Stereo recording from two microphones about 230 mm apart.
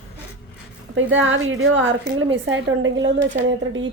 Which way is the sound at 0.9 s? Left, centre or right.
Right.